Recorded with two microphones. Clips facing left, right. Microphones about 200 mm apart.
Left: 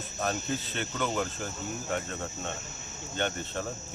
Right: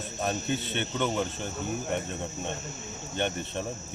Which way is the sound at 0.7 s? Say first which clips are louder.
Right 2 dB; 25° right (ahead or behind).